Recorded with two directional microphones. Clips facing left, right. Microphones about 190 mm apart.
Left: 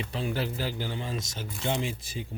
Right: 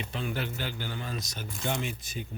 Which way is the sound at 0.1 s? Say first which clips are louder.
Left 3 dB; 35° left (ahead or behind).